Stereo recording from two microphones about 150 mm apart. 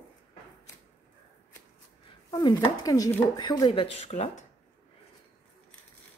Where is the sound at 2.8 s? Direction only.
25° left (ahead or behind); by 4.3 s 45° left (ahead or behind).